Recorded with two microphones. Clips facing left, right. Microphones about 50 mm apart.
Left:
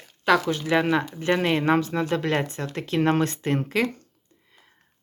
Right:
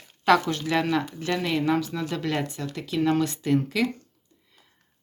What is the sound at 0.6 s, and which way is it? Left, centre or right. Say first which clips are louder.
Speech: left 2 dB; left.